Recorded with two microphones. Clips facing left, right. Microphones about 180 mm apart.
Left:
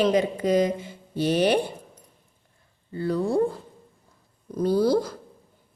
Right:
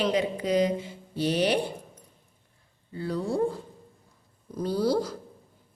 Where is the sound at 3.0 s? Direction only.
55° left (ahead or behind).